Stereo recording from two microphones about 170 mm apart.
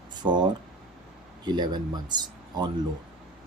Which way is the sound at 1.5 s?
25° right (ahead or behind).